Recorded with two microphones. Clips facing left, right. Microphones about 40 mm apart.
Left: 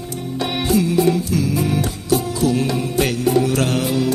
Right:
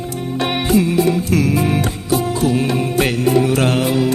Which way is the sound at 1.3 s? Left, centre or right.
Right.